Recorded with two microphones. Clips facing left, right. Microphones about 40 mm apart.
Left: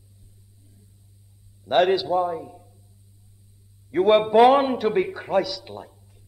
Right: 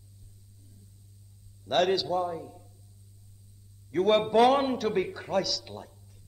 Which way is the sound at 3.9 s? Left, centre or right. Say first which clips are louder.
Left 6 dB; centre.